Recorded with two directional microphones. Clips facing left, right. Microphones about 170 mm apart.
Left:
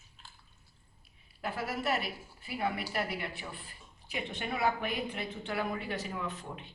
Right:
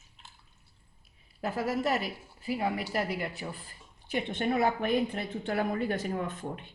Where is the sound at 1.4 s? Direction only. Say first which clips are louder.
Right 5 dB; 40° right (ahead or behind).